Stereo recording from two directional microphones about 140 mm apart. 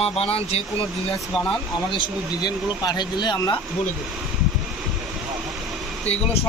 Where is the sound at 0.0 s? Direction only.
45° left (ahead or behind).